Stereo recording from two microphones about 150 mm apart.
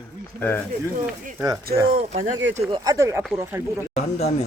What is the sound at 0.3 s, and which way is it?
Speech, 15° left (ahead or behind).